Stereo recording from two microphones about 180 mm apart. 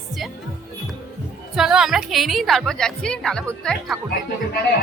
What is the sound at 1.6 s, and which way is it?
Speech, 5° right (ahead or behind).